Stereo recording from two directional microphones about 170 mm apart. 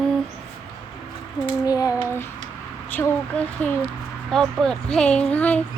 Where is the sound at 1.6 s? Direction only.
20° left (ahead or behind).